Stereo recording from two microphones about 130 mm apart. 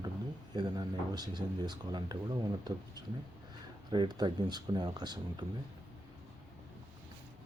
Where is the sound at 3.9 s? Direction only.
35° right (ahead or behind).